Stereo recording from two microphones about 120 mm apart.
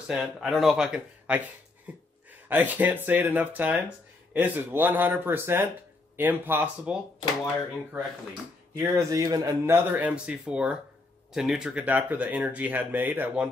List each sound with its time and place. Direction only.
0.1 s speech: 5° right (ahead or behind)
8.7 s speech: 20° right (ahead or behind)
9.7 s speech: 15° right (ahead or behind)